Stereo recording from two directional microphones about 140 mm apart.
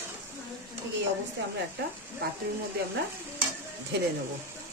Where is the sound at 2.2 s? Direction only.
90° right.